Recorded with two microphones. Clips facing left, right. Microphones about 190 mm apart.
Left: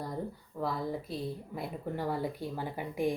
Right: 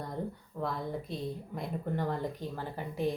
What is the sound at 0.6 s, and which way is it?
Speech, centre (ahead or behind).